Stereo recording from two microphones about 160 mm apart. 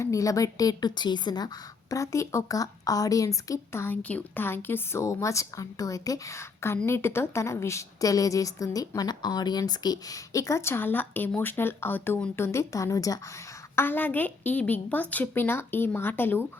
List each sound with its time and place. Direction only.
0.0 s a woman's voice: 20° left (ahead or behind)